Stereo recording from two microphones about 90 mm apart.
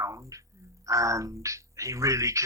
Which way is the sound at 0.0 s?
35° right (ahead or behind).